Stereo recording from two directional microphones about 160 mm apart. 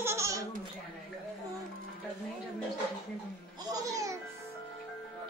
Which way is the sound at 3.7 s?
20° right (ahead or behind).